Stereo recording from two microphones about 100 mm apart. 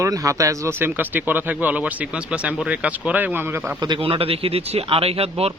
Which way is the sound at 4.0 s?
70° right (ahead or behind).